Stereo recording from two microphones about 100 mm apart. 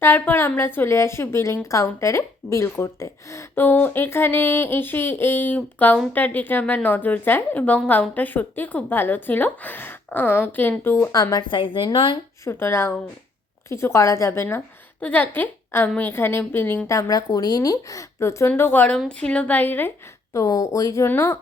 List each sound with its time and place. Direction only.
0.0 s a woman's voice: 20° left (ahead or behind)
11.1 s speech: 45° left (ahead or behind)
12.5 s speech: 25° left (ahead or behind)
15.0 s a woman's voice: 15° left (ahead or behind)
16.8 s a woman's voice: 35° left (ahead or behind)
20.3 s speech: 30° left (ahead or behind)
21.1 s speech: 20° left (ahead or behind)